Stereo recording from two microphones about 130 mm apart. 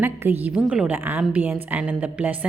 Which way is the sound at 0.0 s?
15° right (ahead or behind).